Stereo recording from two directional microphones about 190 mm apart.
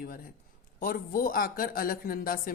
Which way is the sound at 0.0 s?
50° left (ahead or behind).